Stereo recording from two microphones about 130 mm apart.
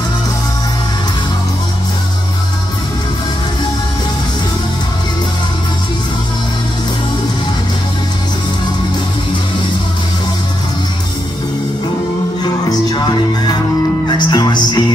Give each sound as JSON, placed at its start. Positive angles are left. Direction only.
{"t": 12.9, "sound": "music", "side_deg": 35}